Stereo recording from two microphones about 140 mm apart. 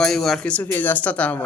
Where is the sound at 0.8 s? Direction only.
10° left (ahead or behind).